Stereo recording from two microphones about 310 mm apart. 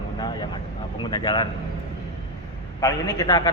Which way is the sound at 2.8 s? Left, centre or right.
Centre.